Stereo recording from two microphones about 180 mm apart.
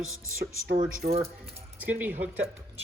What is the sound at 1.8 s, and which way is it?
Speech, 10° right (ahead or behind).